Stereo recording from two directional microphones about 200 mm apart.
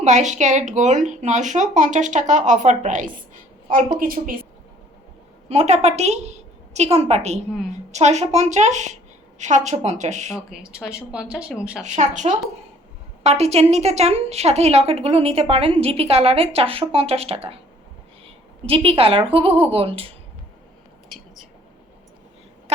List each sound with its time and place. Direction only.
0.0 s a woman's voice: 35° right (ahead or behind)
5.5 s a woman's voice: 35° right (ahead or behind)
10.3 s speech: 5° right (ahead or behind)
11.9 s a woman's voice: 40° right (ahead or behind)
18.6 s a woman's voice: 30° right (ahead or behind)